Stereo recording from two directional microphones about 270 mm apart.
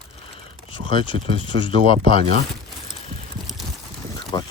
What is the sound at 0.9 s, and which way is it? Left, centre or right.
Speech, centre.